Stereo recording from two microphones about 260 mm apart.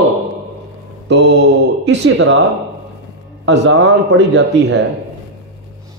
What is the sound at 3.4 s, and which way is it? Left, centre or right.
A man's voice, right.